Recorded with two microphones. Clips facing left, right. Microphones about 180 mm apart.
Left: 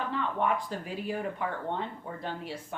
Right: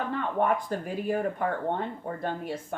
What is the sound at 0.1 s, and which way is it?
Speech, 50° right (ahead or behind).